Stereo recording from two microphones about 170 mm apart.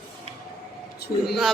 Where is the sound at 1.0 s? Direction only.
70° left (ahead or behind).